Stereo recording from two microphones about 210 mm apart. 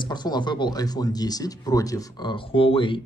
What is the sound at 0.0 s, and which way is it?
Speech, 20° left (ahead or behind).